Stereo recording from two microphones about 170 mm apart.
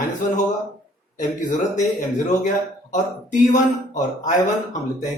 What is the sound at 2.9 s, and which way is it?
Speech, 50° left (ahead or behind).